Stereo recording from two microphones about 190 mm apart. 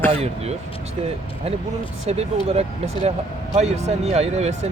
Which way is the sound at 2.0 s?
35° right (ahead or behind).